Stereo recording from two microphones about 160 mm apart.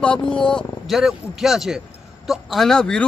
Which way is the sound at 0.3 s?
5° left (ahead or behind).